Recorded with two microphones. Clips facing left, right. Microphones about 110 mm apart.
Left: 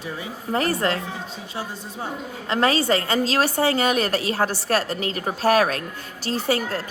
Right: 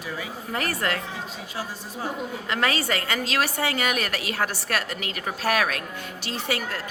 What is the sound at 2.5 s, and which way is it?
A woman's voice, 30° left (ahead or behind).